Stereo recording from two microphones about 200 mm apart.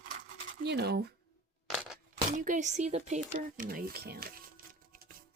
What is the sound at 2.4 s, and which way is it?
Speech, 40° right (ahead or behind).